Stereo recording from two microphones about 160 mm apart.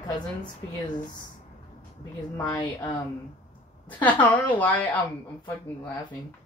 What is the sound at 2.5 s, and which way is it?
Speech, 30° left (ahead or behind).